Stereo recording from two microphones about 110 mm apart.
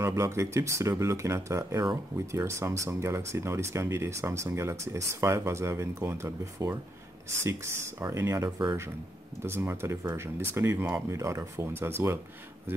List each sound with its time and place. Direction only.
0.0 s speech: 25° right (ahead or behind)